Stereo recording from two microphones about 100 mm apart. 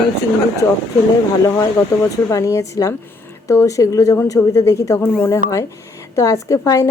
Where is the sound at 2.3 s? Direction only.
30° left (ahead or behind).